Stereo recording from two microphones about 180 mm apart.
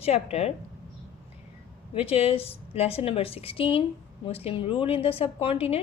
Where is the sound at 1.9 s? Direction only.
35° left (ahead or behind).